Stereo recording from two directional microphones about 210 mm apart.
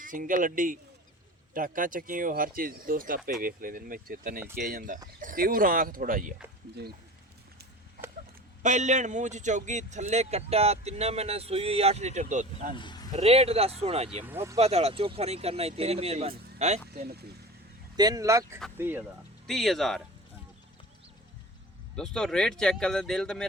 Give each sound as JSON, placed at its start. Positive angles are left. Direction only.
{"t": 0.0, "sound": "a man's voice", "side_deg": -40}
{"t": 8.6, "sound": "a man's voice", "side_deg": -35}
{"t": 12.7, "sound": "a man's voice", "side_deg": 20}
{"t": 13.1, "sound": "speech", "side_deg": -30}
{"t": 14.3, "sound": "speech", "side_deg": -10}
{"t": 14.6, "sound": "speech", "side_deg": -30}
{"t": 17.0, "sound": "speech", "side_deg": -50}
{"t": 17.9, "sound": "speech", "side_deg": -20}
{"t": 19.5, "sound": "speech", "side_deg": 0}
{"t": 21.9, "sound": "speech", "side_deg": 5}